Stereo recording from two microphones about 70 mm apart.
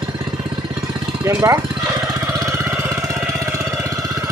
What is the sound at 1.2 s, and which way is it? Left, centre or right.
Speech, right.